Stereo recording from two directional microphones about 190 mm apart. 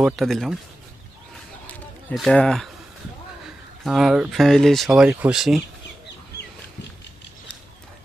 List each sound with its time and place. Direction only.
0.0 s speech: centre (ahead or behind)
1.7 s a sound: 5° left (ahead or behind)
3.8 s speech: centre (ahead or behind)